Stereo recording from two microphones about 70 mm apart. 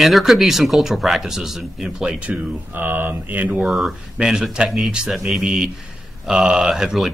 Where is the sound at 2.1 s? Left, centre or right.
Centre.